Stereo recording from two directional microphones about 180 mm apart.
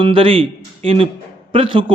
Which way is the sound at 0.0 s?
30° right (ahead or behind).